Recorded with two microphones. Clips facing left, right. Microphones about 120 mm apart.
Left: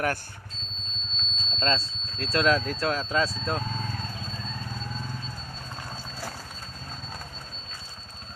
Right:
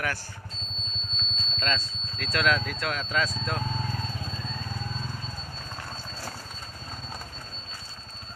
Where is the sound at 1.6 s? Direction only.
30° left (ahead or behind).